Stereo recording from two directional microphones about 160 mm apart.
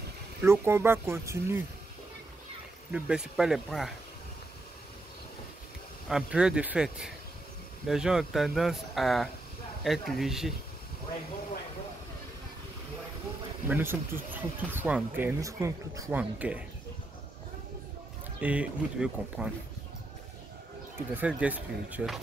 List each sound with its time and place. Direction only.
0.4 s speech: 15° right (ahead or behind)
2.9 s speech: 5° right (ahead or behind)
6.0 s speech: 5° right (ahead or behind)
13.7 s speech: 15° right (ahead or behind)
18.4 s speech: 10° right (ahead or behind)
21.1 s speech: 10° right (ahead or behind)